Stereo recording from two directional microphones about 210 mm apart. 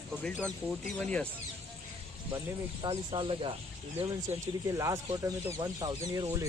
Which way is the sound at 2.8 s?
25° right (ahead or behind).